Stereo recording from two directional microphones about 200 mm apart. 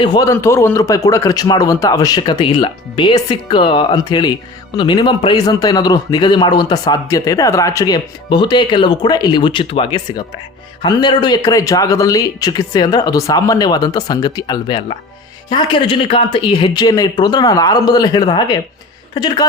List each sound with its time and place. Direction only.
0.0 s a man's voice: 20° left (ahead or behind)